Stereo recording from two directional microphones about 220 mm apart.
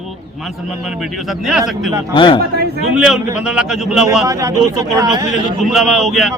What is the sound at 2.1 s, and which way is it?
Speech, 20° left (ahead or behind).